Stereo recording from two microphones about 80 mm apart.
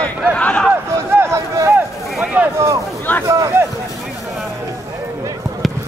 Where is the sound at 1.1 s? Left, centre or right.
Right.